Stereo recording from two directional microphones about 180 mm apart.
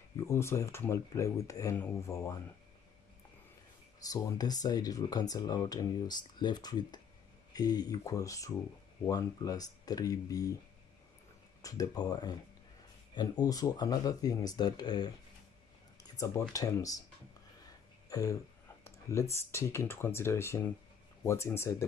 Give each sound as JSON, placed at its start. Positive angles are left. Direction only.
{"t": 0.3, "sound": "speech", "side_deg": 15}
{"t": 4.0, "sound": "speech", "side_deg": 20}
{"t": 11.6, "sound": "speech", "side_deg": 20}
{"t": 18.1, "sound": "a sound", "side_deg": 20}
{"t": 19.3, "sound": "speech", "side_deg": 15}